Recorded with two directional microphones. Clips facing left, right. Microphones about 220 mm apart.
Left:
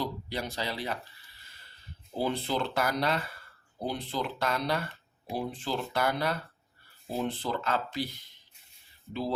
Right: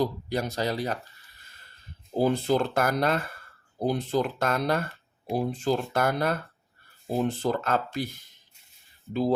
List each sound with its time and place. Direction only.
0.0 s speech: 45° right (ahead or behind)
2.1 s speech: 45° right (ahead or behind)